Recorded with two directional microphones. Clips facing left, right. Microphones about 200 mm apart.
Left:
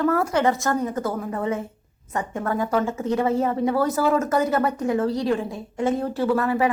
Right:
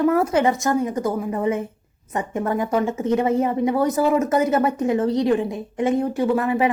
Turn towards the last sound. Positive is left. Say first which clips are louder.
# right 1 dB
turn(degrees=-20)  # may be behind; listen again after turning